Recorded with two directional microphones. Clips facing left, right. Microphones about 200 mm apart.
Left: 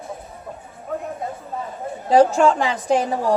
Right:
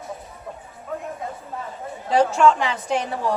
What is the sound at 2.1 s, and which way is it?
A woman's voice, 35° left (ahead or behind).